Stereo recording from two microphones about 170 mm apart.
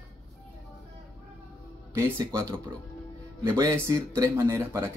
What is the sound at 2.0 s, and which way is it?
Speech, 15° right (ahead or behind).